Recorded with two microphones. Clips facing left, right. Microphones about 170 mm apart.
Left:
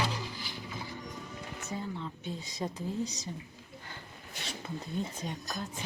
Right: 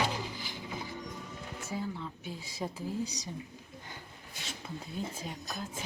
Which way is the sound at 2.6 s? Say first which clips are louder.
Left 1 dB; 10° right (ahead or behind).